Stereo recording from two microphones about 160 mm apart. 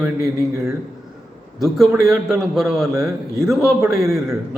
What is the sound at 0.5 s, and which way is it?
Speech, 15° right (ahead or behind).